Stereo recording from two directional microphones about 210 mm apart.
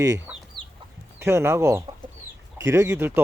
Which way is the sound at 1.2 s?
10° right (ahead or behind).